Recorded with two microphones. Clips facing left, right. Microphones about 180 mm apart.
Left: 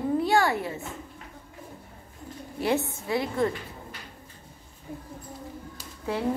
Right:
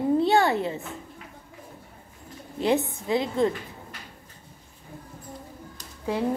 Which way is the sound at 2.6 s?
15° right (ahead or behind).